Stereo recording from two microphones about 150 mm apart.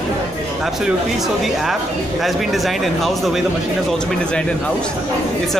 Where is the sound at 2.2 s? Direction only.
Centre (ahead or behind).